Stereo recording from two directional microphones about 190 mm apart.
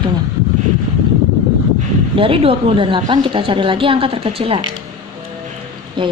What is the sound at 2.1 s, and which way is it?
Speech, 30° right (ahead or behind).